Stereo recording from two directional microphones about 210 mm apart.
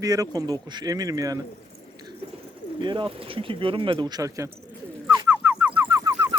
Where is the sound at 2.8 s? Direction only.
25° right (ahead or behind).